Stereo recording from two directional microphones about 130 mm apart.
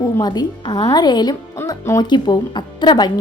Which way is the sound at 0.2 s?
30° left (ahead or behind).